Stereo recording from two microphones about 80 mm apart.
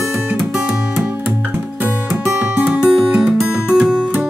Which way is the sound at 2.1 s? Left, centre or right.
Centre.